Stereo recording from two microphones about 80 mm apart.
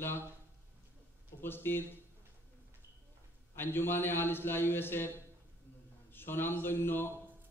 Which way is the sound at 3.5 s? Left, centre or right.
Left.